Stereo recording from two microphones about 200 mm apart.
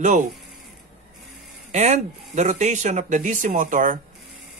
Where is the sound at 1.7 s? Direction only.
35° right (ahead or behind).